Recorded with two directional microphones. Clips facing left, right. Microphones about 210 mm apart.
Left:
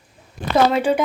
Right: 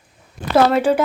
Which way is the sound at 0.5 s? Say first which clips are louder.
Right 2 dB; 5° right (ahead or behind).